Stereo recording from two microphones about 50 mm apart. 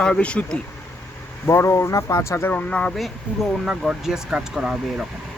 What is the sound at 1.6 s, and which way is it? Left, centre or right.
Speech, left.